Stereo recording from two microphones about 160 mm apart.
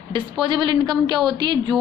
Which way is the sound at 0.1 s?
30° right (ahead or behind).